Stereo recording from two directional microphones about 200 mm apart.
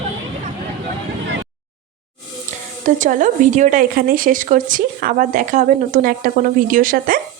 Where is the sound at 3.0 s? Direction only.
40° right (ahead or behind).